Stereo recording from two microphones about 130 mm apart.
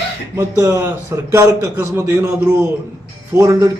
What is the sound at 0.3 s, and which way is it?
A man's voice, 25° right (ahead or behind).